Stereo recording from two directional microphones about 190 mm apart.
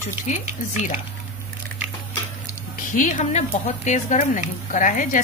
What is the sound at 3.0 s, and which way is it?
A woman's voice, 40° left (ahead or behind).